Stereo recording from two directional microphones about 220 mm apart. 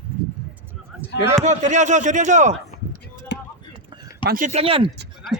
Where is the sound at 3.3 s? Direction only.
50° left (ahead or behind).